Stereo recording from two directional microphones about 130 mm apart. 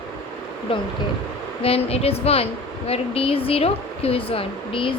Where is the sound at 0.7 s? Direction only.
40° left (ahead or behind).